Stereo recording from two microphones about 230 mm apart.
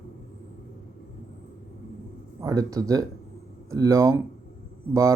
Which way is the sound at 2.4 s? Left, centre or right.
Centre.